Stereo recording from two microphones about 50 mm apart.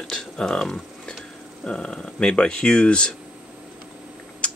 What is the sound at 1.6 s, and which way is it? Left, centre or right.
Speech, centre.